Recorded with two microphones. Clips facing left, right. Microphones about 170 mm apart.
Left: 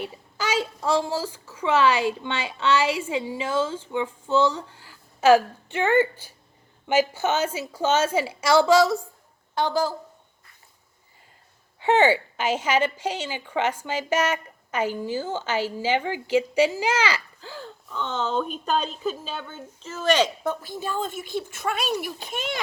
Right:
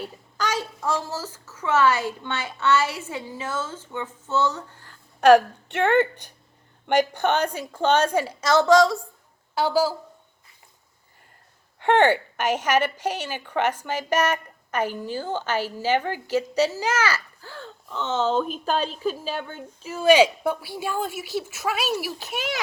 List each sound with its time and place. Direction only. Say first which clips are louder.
0.3 s a child's voice: left 1 dB; 10° left (ahead or behind)
5.9 s speech: left 1 dB; 70° right (ahead or behind)
6.8 s a child's voice: right 1 dB; 5° left (ahead or behind)
9.6 s a woman's voice: right 2 dB; 5° right (ahead or behind)
11.8 s a child's voice: right 1 dB; 10° left (ahead or behind)
17.9 s a woman's voice: right 3 dB; 5° right (ahead or behind)